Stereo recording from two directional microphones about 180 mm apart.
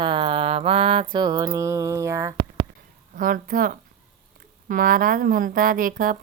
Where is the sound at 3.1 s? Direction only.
50° right (ahead or behind).